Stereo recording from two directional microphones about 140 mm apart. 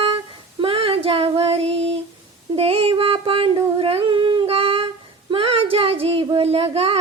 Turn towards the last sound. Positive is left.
turn(degrees=-45)  # may be behind; listen again after turning